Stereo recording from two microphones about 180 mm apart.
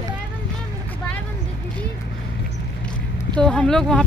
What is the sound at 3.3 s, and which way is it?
Speech, 5° left (ahead or behind).